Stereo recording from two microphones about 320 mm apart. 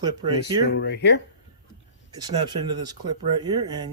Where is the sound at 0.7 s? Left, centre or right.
Left.